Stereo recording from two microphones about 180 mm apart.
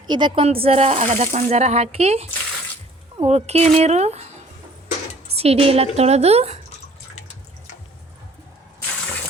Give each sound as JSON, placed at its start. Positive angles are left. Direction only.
{"t": 0.1, "sound": "speech", "side_deg": -25}
{"t": 5.3, "sound": "speech", "side_deg": -35}